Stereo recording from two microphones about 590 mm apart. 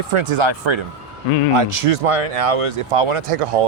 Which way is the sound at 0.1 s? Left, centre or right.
Right.